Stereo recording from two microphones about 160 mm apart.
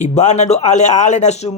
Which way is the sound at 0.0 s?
45° left (ahead or behind).